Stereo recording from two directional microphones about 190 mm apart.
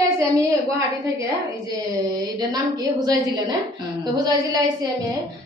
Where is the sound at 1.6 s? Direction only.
20° right (ahead or behind).